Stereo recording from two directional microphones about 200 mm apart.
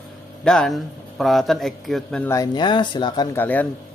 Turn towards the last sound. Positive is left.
turn(degrees=10)  # may be behind; listen again after turning